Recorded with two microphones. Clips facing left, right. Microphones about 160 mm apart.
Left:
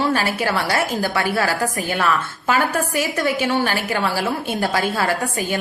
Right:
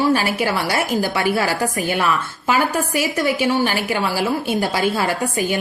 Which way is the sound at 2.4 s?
10° right (ahead or behind).